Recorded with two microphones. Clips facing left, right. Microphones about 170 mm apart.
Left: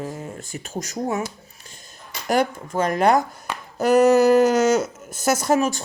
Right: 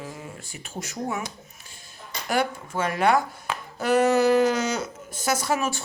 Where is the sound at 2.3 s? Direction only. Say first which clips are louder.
Left 5 dB; 40° left (ahead or behind).